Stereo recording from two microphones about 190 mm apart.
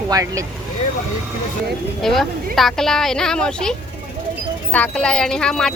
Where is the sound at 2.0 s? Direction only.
Centre (ahead or behind).